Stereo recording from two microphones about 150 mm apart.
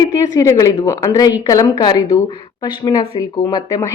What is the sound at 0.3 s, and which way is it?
A woman's voice, 20° left (ahead or behind).